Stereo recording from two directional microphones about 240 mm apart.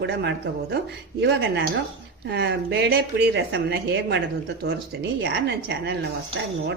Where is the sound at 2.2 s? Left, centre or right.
Right.